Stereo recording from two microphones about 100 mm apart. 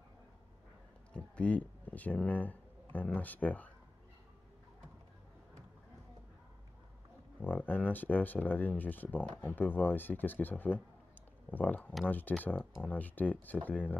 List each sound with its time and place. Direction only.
1.1 s speech: 10° left (ahead or behind)
7.4 s speech: 15° left (ahead or behind)